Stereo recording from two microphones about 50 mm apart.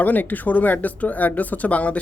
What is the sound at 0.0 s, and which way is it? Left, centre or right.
Speech, left.